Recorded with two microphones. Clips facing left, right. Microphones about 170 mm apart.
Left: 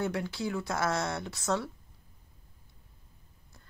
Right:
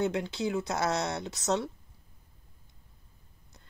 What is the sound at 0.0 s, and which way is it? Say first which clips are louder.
Speech: right 3 dB; 20° right (ahead or behind).